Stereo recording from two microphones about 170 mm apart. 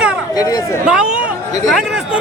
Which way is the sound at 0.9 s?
5° right (ahead or behind).